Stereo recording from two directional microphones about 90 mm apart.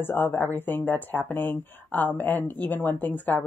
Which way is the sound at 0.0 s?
25° left (ahead or behind).